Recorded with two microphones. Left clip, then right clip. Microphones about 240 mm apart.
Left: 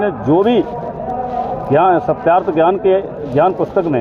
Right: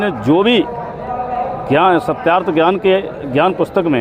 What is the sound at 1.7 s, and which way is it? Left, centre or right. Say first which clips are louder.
A man's voice: even; right.